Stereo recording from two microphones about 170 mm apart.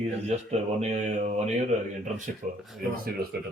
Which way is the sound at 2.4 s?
50° right (ahead or behind).